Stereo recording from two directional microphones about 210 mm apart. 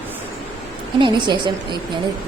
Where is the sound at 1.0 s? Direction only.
20° right (ahead or behind).